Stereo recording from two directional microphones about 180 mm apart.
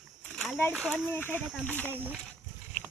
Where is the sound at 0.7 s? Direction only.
10° right (ahead or behind).